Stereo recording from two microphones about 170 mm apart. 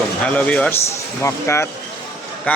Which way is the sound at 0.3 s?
5° left (ahead or behind).